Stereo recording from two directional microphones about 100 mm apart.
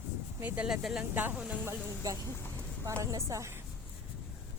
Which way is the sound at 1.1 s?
20° right (ahead or behind).